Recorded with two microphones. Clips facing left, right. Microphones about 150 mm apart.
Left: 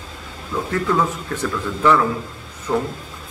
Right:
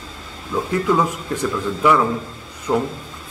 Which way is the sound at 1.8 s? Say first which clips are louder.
Even; 10° right (ahead or behind).